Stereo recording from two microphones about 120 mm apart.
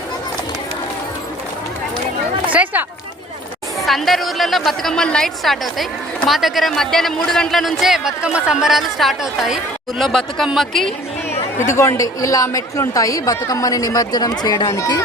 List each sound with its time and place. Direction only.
2.5 s a sound: 10° right (ahead or behind)
3.8 s speech: centre (ahead or behind)
11.5 s a man's voice: 20° left (ahead or behind)